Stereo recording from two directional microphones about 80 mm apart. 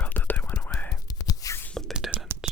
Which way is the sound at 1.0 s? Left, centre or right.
Left.